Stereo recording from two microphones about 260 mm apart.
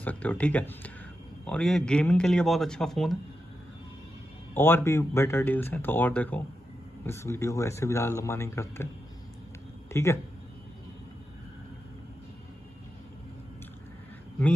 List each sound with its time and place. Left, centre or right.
0.0 s a man's voice: centre
4.6 s speech: centre
9.8 s speech: centre